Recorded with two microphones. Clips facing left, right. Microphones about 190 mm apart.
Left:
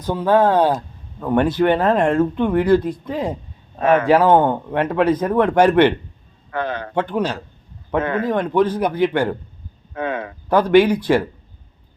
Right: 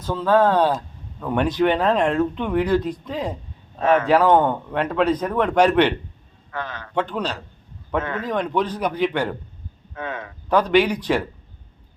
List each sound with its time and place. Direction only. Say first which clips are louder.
0.0 s speech: left 2 dB; 15° left (ahead or behind)
3.8 s a man's voice: left 2 dB; 55° left (ahead or behind)
4.1 s speech: left 3 dB; 10° left (ahead or behind)
6.5 s a sound: left 7 dB; 55° left (ahead or behind)
7.0 s speech: left 4 dB; 10° left (ahead or behind)
8.0 s speech: left 7 dB; 55° left (ahead or behind)
8.3 s speech: left 4 dB; 5° left (ahead or behind)
9.9 s speech: left 7 dB; 60° left (ahead or behind)
10.5 s speech: left 4 dB; 10° left (ahead or behind)